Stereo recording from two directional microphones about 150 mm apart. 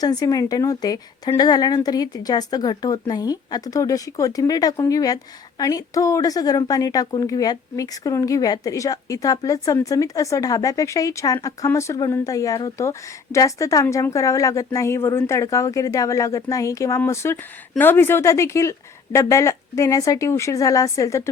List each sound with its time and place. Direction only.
0.0 s a woman's voice: 25° left (ahead or behind)